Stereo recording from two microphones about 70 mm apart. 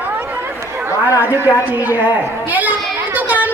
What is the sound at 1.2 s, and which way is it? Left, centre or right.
Speech, right.